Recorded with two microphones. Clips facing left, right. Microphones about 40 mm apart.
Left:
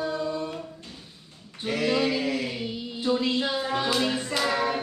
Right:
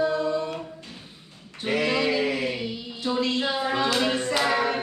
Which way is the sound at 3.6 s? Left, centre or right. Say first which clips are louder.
Right 3 dB; right.